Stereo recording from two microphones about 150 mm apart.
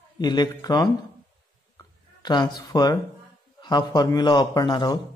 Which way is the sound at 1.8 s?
30° left (ahead or behind).